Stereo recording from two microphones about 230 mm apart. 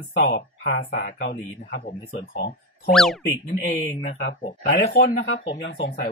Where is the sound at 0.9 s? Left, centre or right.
Left.